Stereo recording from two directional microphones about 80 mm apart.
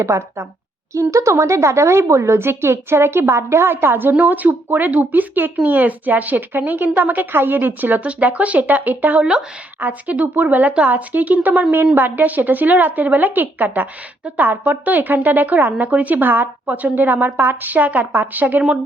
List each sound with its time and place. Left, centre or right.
0.0 s a woman's voice: right; by 18.9 s centre